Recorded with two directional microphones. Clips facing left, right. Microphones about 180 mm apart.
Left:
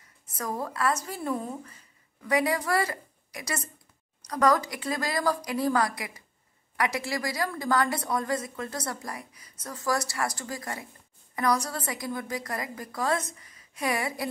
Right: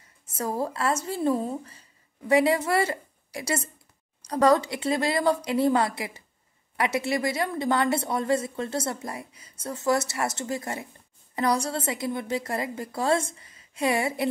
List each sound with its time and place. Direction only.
0.3 s a woman's voice: 30° right (ahead or behind)